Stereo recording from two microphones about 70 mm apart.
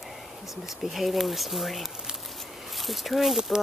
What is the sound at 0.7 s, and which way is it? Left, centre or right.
Speech, centre.